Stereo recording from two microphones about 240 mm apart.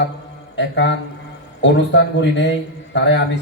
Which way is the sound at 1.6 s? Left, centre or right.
Left.